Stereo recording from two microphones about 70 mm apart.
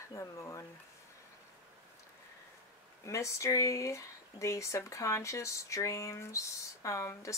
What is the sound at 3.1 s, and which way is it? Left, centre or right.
Speech, left.